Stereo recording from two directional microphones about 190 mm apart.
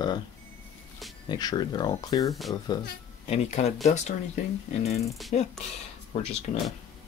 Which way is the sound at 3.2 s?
35° left (ahead or behind).